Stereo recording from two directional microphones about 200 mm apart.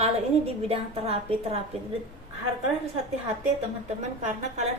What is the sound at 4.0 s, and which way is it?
Speech, 35° right (ahead or behind).